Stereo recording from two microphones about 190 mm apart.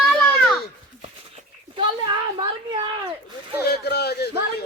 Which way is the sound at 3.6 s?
60° left (ahead or behind).